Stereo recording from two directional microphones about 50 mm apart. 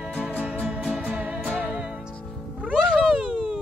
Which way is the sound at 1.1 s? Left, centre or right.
Right.